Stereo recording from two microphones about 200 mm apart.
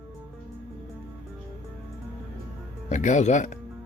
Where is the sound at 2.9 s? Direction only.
35° left (ahead or behind).